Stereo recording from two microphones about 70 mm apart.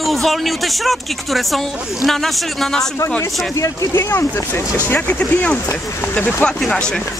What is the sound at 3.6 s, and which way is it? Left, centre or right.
Speech, left.